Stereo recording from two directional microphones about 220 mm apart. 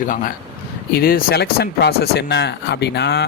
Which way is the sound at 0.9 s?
45° left (ahead or behind).